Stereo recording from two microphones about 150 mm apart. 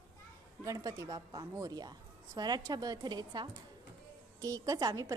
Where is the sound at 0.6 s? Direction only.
20° right (ahead or behind).